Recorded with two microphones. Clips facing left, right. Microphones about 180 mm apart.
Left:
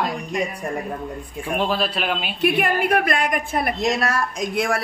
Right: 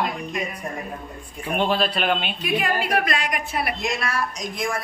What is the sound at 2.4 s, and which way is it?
A woman's voice, 60° left (ahead or behind).